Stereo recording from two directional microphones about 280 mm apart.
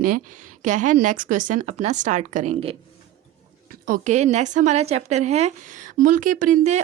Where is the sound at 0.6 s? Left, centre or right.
Right.